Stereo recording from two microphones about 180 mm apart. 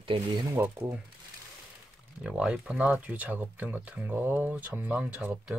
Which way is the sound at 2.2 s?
5° right (ahead or behind).